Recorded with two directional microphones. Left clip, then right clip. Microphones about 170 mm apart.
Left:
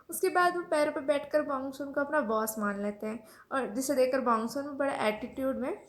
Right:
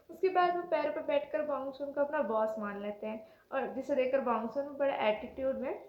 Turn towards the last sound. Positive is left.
turn(degrees=65)  # may be behind; listen again after turning